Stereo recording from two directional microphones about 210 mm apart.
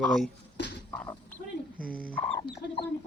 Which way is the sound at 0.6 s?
55° left (ahead or behind).